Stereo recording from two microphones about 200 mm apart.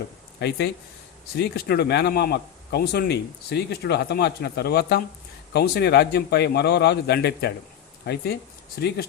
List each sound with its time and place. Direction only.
0.3 s a man's voice: 55° left (ahead or behind)